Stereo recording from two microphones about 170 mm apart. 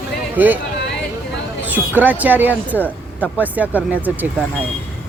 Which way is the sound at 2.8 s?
10° left (ahead or behind).